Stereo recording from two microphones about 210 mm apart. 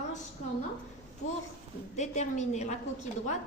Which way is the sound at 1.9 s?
35° left (ahead or behind).